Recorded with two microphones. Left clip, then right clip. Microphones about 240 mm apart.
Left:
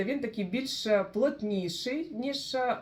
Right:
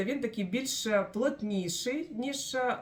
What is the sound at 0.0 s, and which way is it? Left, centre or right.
A woman's voice, centre.